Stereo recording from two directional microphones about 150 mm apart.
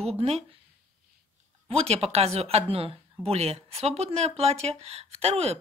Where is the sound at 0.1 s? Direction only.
40° right (ahead or behind).